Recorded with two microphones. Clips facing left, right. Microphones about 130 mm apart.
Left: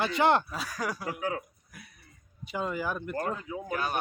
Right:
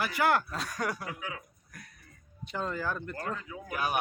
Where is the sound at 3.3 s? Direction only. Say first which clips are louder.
Left 4 dB; 25° left (ahead or behind).